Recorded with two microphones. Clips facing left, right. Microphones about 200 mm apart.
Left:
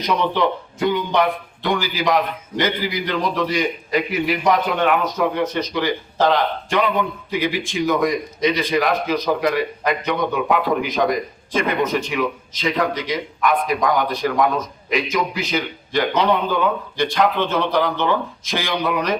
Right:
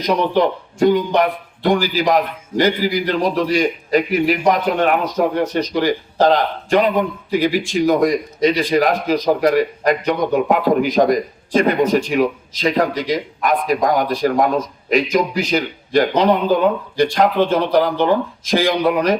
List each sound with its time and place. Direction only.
0.1 s a man's voice: 40° right (ahead or behind)